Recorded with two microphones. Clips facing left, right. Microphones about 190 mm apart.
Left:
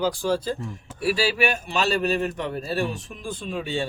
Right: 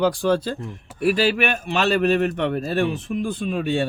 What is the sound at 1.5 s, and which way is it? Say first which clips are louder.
Speech: right 3 dB; 60° right (ahead or behind).